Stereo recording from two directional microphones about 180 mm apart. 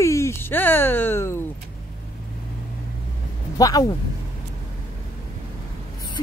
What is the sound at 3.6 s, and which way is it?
Speech, 20° left (ahead or behind).